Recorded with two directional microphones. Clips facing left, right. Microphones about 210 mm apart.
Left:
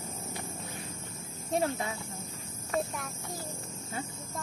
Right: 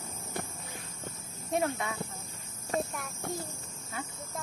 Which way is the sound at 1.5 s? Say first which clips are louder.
Even; 30° left (ahead or behind).